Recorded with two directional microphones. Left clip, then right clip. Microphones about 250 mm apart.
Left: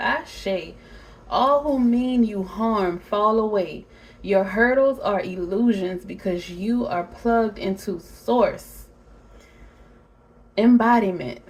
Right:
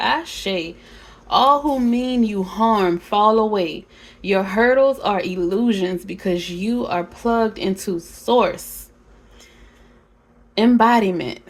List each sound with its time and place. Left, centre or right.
0.0 s a sound: right
1.3 s speech: right
10.5 s speech: right